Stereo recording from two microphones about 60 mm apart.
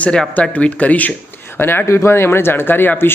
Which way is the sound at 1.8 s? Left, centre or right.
Left.